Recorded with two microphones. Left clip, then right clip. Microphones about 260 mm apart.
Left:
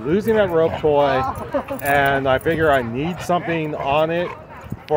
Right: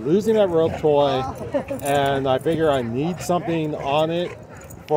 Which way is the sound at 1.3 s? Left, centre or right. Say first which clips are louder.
Left 1 dB; left.